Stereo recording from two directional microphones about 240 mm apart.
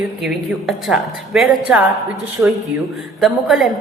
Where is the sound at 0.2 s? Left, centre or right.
Centre.